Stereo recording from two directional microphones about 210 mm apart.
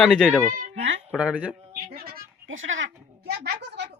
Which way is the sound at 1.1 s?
5° right (ahead or behind).